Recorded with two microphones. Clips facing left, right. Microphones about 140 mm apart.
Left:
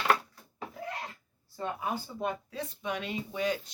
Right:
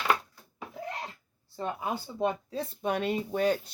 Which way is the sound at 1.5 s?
20° right (ahead or behind).